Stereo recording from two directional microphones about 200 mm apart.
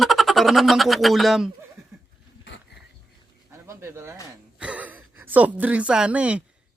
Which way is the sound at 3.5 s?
15° right (ahead or behind).